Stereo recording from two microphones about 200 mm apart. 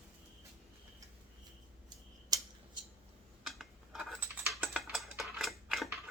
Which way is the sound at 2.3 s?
20° right (ahead or behind).